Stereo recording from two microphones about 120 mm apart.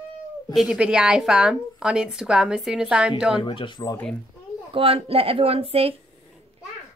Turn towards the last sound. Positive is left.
turn(degrees=-55)  # may be behind; listen again after turning